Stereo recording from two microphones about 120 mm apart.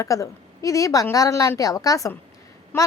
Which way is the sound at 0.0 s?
25° left (ahead or behind).